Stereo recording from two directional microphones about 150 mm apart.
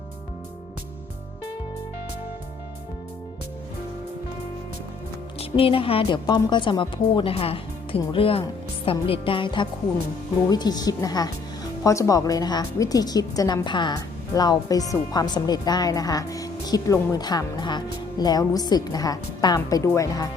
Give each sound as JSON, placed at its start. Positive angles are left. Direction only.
{"t": 5.4, "sound": "a woman's voice", "side_deg": 35}